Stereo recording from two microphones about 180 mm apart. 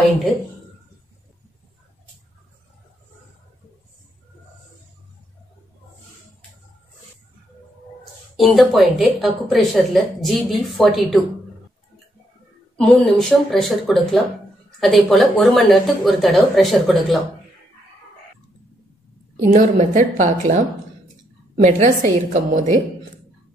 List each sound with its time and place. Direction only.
8.4 s a woman's voice: centre (ahead or behind)
12.7 s a woman's voice: centre (ahead or behind)
19.4 s a woman's voice: 45° right (ahead or behind)